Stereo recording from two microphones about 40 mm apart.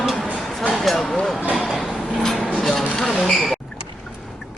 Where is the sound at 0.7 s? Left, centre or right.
Centre.